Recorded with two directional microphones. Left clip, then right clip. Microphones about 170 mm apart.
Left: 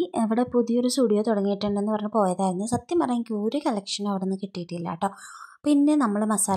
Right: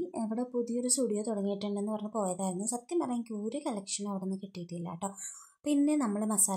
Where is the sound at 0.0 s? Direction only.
35° left (ahead or behind).